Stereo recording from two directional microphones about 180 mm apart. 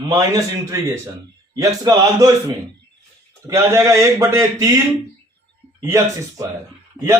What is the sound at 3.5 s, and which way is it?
A man's voice, 15° right (ahead or behind).